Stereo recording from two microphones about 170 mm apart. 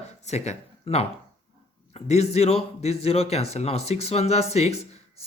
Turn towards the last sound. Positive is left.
turn(degrees=40)  # may be behind; listen again after turning